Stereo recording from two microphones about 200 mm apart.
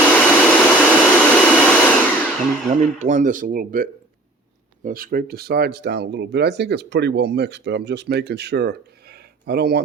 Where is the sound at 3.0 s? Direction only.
40° right (ahead or behind).